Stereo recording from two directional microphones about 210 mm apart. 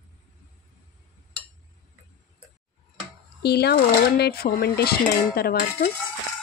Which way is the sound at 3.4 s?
50° left (ahead or behind).